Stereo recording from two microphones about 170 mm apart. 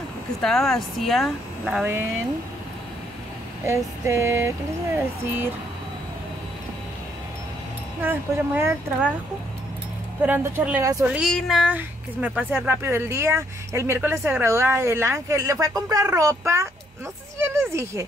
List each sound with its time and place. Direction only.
0.4 s speech: centre (ahead or behind)
3.6 s speech: 15° right (ahead or behind)
8.0 s speech: 10° right (ahead or behind)
10.2 s speech: 10° right (ahead or behind)
11.1 s speech: centre (ahead or behind); by 18.0 s 15° right (ahead or behind)